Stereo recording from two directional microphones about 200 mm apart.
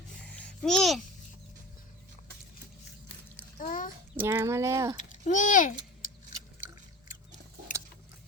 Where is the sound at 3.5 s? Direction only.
45° left (ahead or behind).